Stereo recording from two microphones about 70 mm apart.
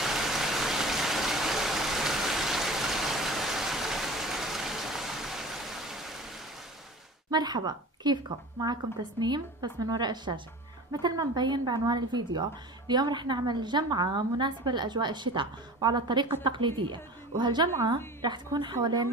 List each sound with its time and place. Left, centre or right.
0.0 s vehicle: centre
7.2 s a woman's voice: right
10.9 s speech: right
17.3 s speech: right